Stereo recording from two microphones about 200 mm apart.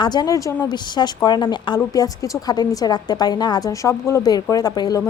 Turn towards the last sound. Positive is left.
turn(degrees=20)  # may be behind; listen again after turning